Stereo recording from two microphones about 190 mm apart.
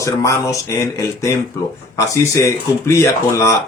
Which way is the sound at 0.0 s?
15° left (ahead or behind).